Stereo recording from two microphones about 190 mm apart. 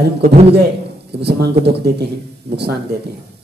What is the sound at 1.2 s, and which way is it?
Speech, 60° right (ahead or behind).